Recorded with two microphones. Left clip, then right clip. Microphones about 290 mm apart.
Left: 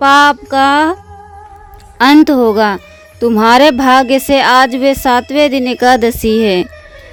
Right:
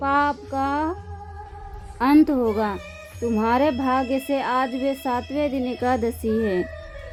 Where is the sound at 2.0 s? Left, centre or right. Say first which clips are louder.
Left 11 dB; left.